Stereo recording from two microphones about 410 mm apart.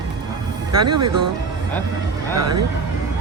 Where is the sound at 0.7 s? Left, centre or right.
Right.